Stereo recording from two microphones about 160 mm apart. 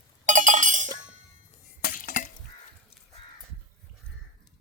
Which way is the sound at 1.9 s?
60° left (ahead or behind).